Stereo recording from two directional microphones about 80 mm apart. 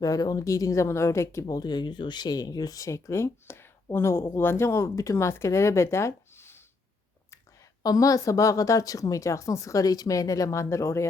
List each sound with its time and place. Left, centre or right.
0.0 s speech: left
1.6 s speech: left
7.9 s speech: left